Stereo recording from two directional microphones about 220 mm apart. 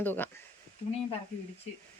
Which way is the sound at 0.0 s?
10° left (ahead or behind).